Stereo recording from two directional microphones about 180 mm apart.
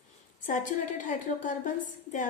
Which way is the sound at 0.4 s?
45° left (ahead or behind).